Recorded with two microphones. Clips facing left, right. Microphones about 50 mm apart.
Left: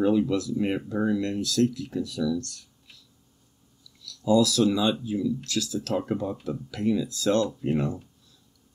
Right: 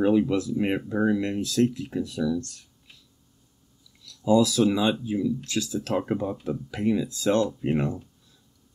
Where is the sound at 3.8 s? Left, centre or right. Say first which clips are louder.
Right 1 dB; right.